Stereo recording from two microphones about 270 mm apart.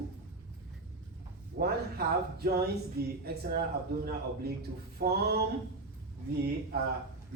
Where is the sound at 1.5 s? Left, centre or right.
Right.